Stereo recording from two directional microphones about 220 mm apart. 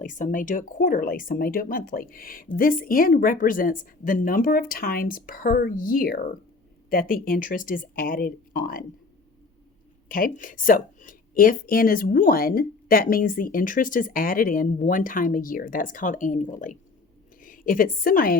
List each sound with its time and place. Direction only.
0.0 s speech: 35° left (ahead or behind)
10.1 s a woman's voice: 40° left (ahead or behind)